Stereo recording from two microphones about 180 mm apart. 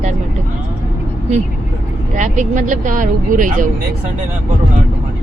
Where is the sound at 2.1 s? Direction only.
45° right (ahead or behind).